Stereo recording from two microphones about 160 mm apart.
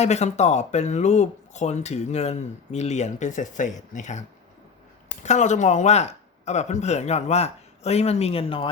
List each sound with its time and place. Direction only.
0.0 s speech: 45° left (ahead or behind)